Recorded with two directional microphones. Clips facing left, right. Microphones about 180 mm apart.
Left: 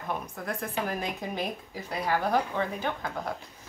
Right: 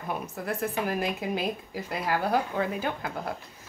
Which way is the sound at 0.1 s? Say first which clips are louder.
Right 2 dB; 5° right (ahead or behind).